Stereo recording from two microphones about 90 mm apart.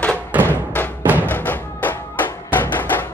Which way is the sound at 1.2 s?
20° left (ahead or behind).